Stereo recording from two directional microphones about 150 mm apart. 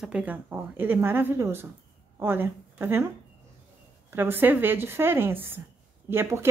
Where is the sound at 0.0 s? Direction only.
10° right (ahead or behind).